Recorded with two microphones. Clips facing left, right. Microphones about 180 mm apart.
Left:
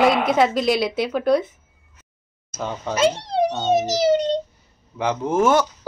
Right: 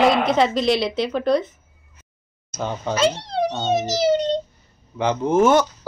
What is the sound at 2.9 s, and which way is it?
A child's voice, 45° left (ahead or behind).